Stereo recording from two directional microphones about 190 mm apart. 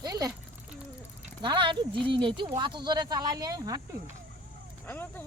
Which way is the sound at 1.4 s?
25° right (ahead or behind).